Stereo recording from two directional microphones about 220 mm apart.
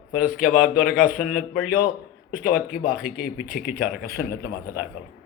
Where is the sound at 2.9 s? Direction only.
5° right (ahead or behind).